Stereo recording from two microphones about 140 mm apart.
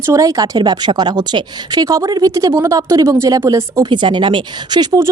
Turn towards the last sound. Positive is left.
turn(degrees=-25)  # may be behind; listen again after turning